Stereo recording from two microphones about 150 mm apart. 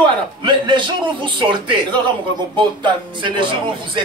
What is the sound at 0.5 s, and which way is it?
A man's voice, 30° right (ahead or behind).